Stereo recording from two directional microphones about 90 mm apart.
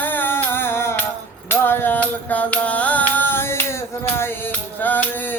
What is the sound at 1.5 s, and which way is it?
Music, 25° left (ahead or behind).